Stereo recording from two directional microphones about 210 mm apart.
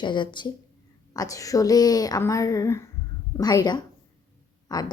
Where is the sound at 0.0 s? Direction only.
20° left (ahead or behind).